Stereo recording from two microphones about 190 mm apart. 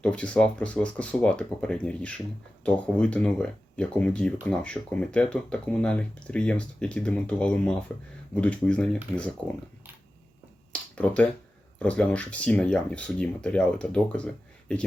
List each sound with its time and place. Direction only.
0.0 s speech: 5° left (ahead or behind)
10.7 s a sound: 5° left (ahead or behind)
11.8 s speech: 5° left (ahead or behind)